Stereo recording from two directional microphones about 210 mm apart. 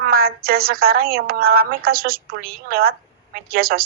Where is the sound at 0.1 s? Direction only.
45° right (ahead or behind).